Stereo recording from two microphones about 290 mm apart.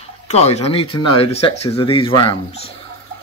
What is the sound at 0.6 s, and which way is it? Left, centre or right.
Speech, centre.